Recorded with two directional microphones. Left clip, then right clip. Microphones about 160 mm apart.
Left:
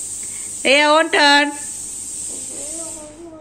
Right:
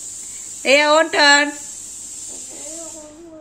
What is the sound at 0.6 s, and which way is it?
Speech, centre (ahead or behind).